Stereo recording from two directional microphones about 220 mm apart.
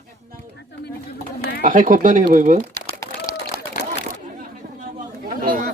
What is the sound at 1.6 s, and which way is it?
Speech, 40° right (ahead or behind).